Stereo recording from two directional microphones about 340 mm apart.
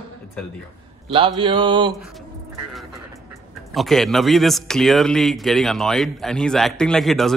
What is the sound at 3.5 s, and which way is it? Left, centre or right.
Speech, centre.